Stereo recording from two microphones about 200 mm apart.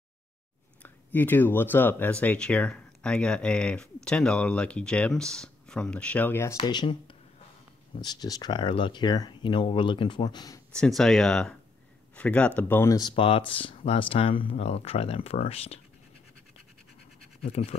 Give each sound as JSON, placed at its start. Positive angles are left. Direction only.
{"t": 0.8, "sound": "speech", "side_deg": 10}
{"t": 6.5, "sound": "speech", "side_deg": 20}
{"t": 10.7, "sound": "speech", "side_deg": 5}
{"t": 13.1, "sound": "speech", "side_deg": 25}
{"t": 17.4, "sound": "speech", "side_deg": 30}